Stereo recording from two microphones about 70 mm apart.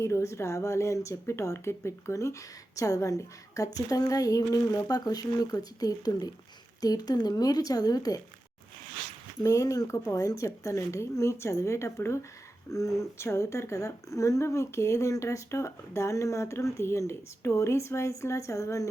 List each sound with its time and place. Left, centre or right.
0.0 s a woman's voice: left
9.4 s a woman's voice: left
13.2 s a woman's voice: left